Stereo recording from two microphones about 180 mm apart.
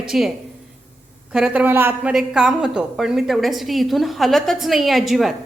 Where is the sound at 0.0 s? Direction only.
Centre (ahead or behind).